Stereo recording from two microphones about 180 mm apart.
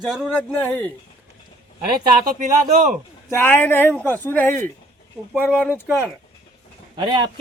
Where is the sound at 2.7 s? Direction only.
45° right (ahead or behind).